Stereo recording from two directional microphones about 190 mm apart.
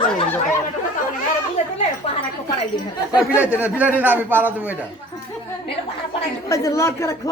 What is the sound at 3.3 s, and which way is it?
A man's voice, 10° right (ahead or behind).